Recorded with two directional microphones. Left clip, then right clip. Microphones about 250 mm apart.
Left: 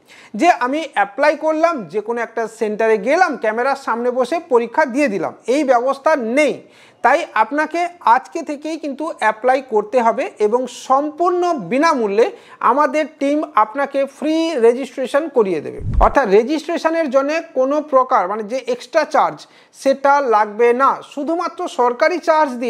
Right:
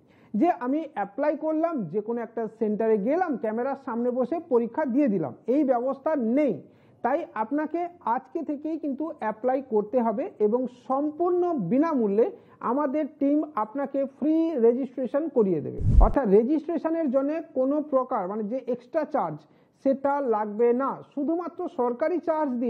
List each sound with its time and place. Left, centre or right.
0.4 s a woman's voice: centre